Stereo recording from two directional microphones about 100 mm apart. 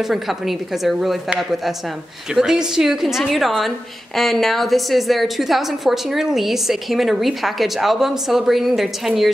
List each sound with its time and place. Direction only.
0.0 s a woman's voice: centre (ahead or behind)
2.3 s a woman's voice: 5° right (ahead or behind)